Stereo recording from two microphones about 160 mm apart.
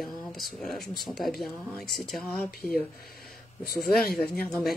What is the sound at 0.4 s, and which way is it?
Speech, centre (ahead or behind).